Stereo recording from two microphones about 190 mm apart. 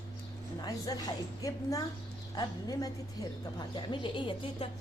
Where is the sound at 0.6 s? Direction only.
20° left (ahead or behind).